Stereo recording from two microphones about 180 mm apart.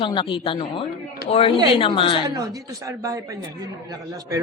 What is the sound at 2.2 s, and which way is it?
Speech, 20° right (ahead or behind).